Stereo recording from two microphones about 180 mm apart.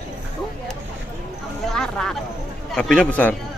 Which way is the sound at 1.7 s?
5° left (ahead or behind).